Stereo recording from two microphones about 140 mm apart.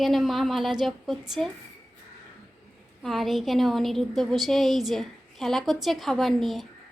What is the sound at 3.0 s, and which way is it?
A woman's voice, centre (ahead or behind).